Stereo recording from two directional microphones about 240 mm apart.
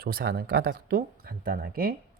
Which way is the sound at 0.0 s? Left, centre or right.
Right.